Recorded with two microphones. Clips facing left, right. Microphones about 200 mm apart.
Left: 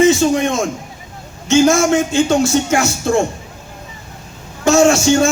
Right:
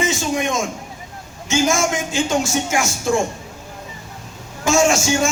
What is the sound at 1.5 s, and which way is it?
Speech, 65° left (ahead or behind).